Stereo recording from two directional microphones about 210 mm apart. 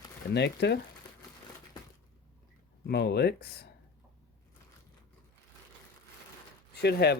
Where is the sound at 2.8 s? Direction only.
50° left (ahead or behind).